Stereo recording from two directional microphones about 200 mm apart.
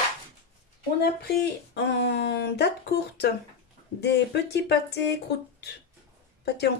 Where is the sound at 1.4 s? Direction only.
60° left (ahead or behind).